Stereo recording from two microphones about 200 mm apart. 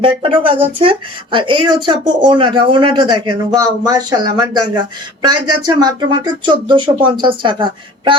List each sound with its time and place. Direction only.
0.0 s speech: 25° right (ahead or behind)